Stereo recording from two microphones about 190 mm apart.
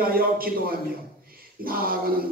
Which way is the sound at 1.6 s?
50° right (ahead or behind).